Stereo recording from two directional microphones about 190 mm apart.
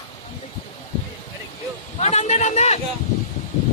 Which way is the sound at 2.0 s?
35° left (ahead or behind).